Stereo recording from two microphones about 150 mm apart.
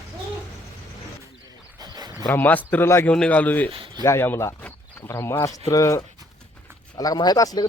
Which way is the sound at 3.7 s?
35° right (ahead or behind).